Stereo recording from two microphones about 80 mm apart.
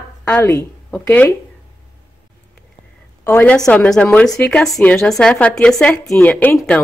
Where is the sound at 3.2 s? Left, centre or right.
Left.